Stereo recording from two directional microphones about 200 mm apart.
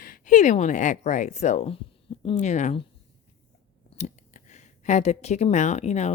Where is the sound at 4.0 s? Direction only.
35° left (ahead or behind).